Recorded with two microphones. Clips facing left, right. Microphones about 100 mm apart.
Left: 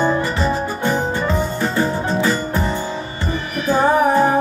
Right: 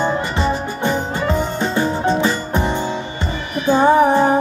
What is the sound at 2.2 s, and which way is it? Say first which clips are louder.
Music: even; 25° right (ahead or behind).